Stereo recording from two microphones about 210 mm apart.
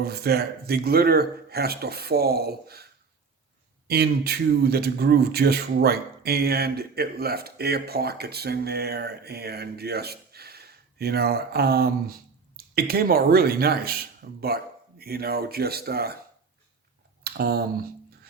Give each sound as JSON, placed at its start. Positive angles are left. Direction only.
{"t": 0.0, "sound": "speech", "side_deg": -50}
{"t": 3.8, "sound": "speech", "side_deg": -50}
{"t": 17.2, "sound": "speech", "side_deg": -50}